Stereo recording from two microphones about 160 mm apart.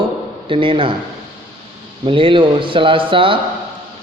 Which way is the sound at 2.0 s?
35° right (ahead or behind).